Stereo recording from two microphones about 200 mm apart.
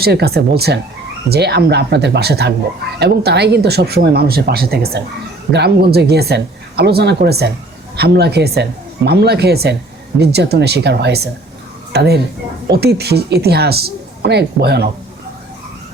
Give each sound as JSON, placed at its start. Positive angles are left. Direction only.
{"t": 0.0, "sound": "speech", "side_deg": -55}